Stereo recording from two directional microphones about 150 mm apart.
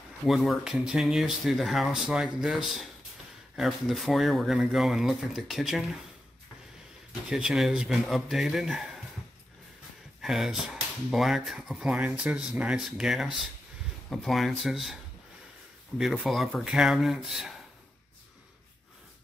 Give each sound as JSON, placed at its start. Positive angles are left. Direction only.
{"t": 0.2, "sound": "speech", "side_deg": 0}
{"t": 7.2, "sound": "speech", "side_deg": -5}
{"t": 10.2, "sound": "speech", "side_deg": 0}
{"t": 16.0, "sound": "speech", "side_deg": 0}